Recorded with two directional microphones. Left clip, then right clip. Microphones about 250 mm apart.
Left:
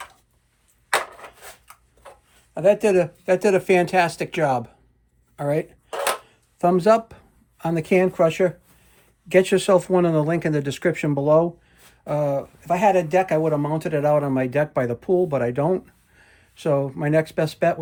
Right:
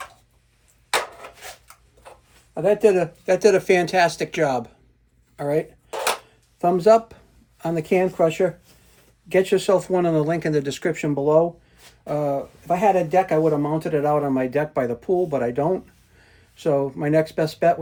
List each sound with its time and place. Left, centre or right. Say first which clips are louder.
2.8 s speech: right 1 dB; left
13.1 s speech: right 1 dB; left
13.3 s speech: right 1 dB; left